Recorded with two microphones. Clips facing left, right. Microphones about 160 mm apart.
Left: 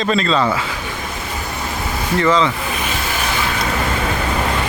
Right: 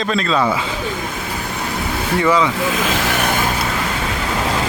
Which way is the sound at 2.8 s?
85° right.